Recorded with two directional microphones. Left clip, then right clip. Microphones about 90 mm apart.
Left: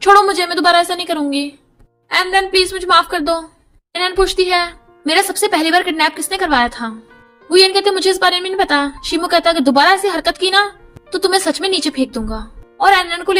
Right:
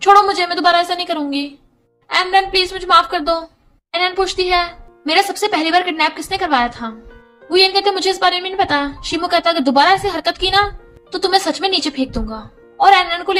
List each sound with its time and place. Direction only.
0.0 s a woman's voice: 35° left (ahead or behind)